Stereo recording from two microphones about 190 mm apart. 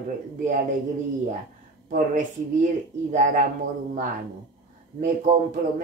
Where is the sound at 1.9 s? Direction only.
45° right (ahead or behind).